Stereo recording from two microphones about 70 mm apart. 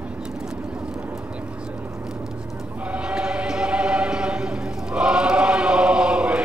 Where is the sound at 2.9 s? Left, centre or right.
Centre.